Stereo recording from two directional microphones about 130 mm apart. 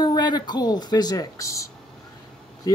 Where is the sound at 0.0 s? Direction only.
35° left (ahead or behind).